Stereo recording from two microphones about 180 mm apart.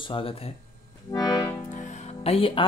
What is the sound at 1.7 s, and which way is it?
Music, 40° left (ahead or behind).